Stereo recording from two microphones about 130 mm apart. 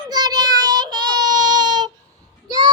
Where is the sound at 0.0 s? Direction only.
30° right (ahead or behind).